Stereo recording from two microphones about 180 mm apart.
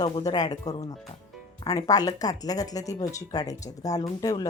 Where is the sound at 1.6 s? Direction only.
20° left (ahead or behind).